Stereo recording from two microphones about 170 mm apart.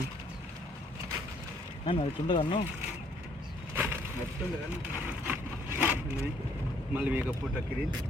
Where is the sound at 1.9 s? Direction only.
30° left (ahead or behind).